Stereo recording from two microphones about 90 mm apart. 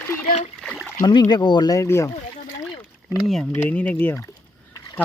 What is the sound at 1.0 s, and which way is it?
Speech, 55° left (ahead or behind).